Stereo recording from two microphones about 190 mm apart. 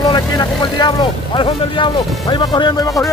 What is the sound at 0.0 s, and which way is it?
Speech, 20° left (ahead or behind).